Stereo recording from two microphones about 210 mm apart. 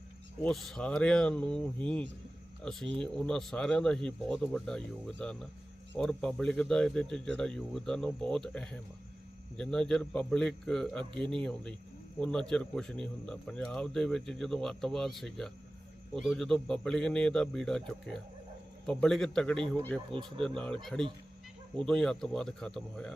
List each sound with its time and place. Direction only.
0.4 s speech: centre (ahead or behind)
20.1 s speech: 25° right (ahead or behind)
20.4 s speech: 5° left (ahead or behind)
21.8 s speech: centre (ahead or behind)